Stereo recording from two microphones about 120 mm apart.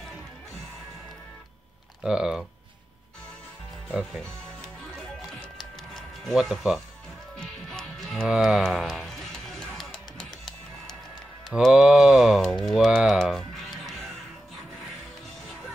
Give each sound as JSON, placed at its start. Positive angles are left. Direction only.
{"t": 2.0, "sound": "speech", "side_deg": -5}
{"t": 3.9, "sound": "speech", "side_deg": 0}
{"t": 4.9, "sound": "music", "side_deg": 0}
{"t": 11.6, "sound": "speech", "side_deg": -5}